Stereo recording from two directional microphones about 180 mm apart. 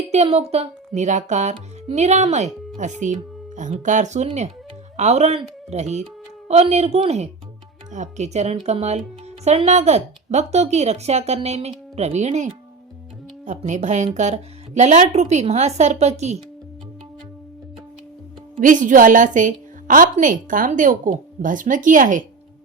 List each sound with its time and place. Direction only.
0.1 s speech: 35° right (ahead or behind)
18.6 s a woman's voice: 45° right (ahead or behind)